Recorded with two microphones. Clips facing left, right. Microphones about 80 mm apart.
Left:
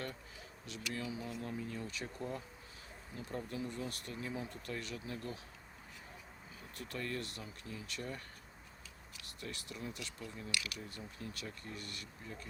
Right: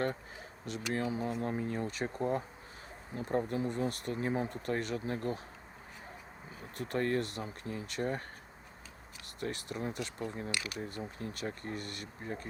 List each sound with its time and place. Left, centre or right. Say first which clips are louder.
0.0 s speech: right 10 dB; right
6.6 s speech: right 10 dB; right
9.4 s speech: right 8 dB; right